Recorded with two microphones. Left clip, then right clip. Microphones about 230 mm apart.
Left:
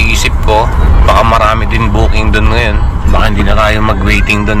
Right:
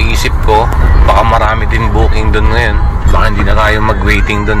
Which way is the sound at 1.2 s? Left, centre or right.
Centre.